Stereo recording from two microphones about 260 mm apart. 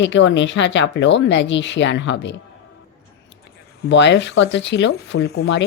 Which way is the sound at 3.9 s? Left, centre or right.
Left.